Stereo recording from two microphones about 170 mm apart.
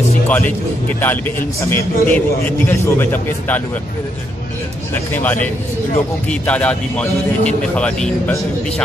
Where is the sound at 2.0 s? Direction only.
10° left (ahead or behind).